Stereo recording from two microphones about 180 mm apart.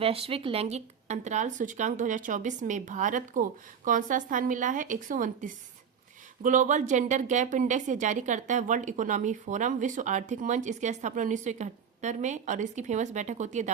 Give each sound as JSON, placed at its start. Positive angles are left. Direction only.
{"t": 0.0, "sound": "a woman's voice", "side_deg": -30}